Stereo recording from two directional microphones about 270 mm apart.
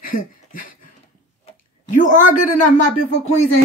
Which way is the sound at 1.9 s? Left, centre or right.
Left.